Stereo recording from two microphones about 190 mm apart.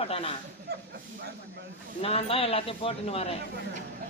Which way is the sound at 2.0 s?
30° left (ahead or behind).